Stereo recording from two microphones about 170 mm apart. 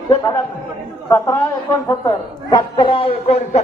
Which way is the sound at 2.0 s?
25° left (ahead or behind).